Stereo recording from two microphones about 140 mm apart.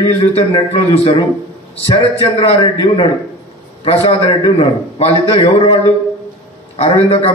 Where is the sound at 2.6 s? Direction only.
35° left (ahead or behind).